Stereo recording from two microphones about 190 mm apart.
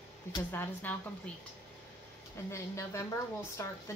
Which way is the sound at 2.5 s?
15° left (ahead or behind).